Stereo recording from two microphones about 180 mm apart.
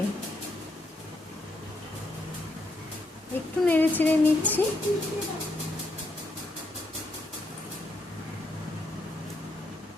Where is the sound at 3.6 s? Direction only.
10° left (ahead or behind).